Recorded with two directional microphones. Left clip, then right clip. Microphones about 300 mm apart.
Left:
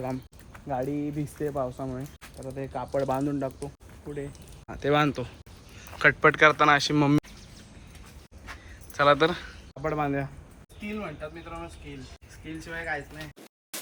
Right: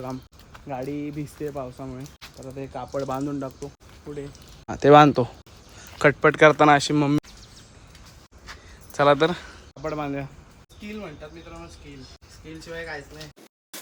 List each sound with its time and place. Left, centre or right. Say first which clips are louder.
0.0 s speech: left 1 dB; centre
4.3 s speech: right 7 dB; right; by 7.2 s centre
8.9 s speech: right 3 dB; centre